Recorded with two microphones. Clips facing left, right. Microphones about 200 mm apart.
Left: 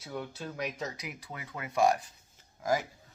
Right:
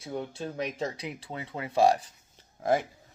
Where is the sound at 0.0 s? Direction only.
25° right (ahead or behind).